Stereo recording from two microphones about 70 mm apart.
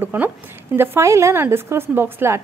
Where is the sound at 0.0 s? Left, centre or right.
Right.